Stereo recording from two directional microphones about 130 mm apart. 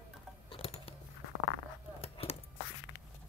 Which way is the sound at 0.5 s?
50° left (ahead or behind).